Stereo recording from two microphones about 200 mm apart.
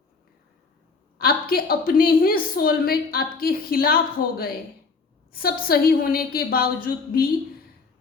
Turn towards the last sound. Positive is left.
turn(degrees=45)  # may be behind; listen again after turning